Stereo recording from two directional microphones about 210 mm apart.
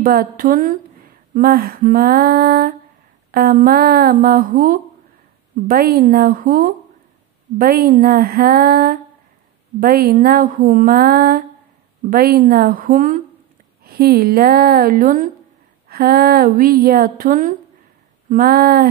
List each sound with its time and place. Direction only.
0.0 s a woman's voice: 45° right (ahead or behind)